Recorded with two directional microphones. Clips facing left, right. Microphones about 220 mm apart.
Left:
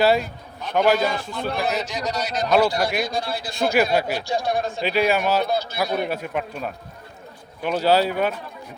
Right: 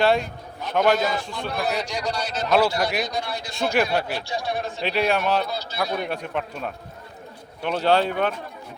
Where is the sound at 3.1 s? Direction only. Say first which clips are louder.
Left 2 dB; 30° left (ahead or behind).